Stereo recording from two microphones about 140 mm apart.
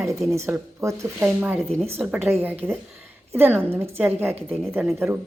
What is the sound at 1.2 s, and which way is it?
A woman's voice, 10° right (ahead or behind).